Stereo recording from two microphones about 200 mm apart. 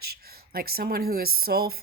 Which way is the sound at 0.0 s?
50° right (ahead or behind).